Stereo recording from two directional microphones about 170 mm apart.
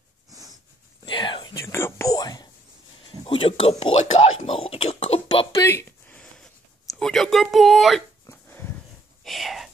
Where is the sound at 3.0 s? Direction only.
30° left (ahead or behind).